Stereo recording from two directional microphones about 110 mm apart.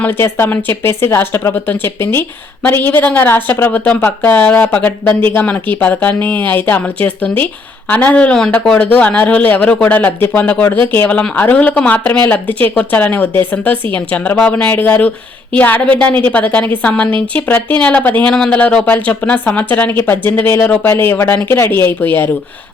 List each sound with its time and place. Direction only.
0.0 s a woman's voice: 20° left (ahead or behind)